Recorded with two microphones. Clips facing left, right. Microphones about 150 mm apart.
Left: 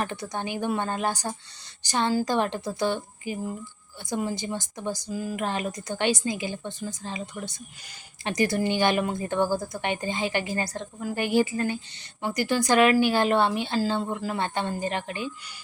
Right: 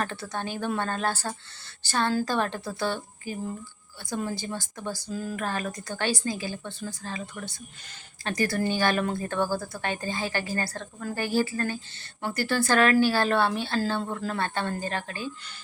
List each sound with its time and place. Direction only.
0.0 s a woman's voice: 15° left (ahead or behind)